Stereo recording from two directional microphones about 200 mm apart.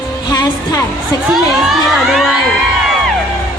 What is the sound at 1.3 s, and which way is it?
Crowd, centre (ahead or behind).